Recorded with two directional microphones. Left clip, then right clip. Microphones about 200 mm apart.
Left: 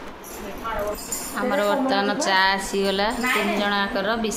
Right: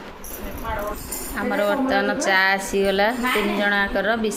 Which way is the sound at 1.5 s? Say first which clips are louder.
Right 1 dB; centre (ahead or behind).